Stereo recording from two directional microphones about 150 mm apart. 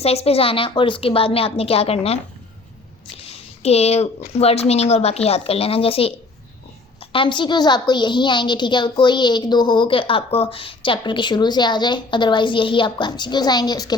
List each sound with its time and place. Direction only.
0.0 s a woman's voice: 40° left (ahead or behind)
3.2 s a sound: 45° left (ahead or behind)
4.4 s a woman's voice: 45° left (ahead or behind); by 13.9 s 25° left (ahead or behind)